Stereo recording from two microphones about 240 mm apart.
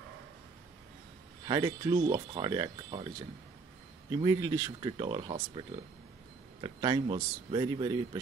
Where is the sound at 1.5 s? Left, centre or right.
Centre.